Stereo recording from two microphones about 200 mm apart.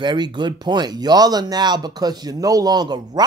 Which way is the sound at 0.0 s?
20° right (ahead or behind).